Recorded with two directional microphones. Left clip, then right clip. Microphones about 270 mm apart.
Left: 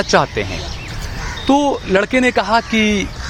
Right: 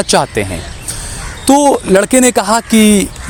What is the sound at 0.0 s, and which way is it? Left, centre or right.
Speech, right.